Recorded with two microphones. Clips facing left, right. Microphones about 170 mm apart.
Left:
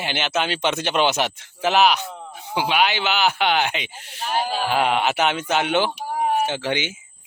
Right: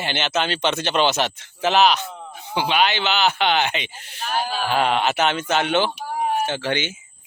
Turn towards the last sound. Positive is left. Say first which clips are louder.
# even
turn(degrees=10)  # may be behind; listen again after turning